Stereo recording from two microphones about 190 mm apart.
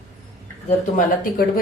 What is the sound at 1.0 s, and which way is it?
Speech, 45° left (ahead or behind).